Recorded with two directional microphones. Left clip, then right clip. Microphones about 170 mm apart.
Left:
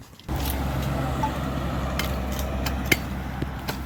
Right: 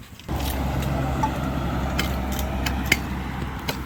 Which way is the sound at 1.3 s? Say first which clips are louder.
Right 2 dB; 15° left (ahead or behind).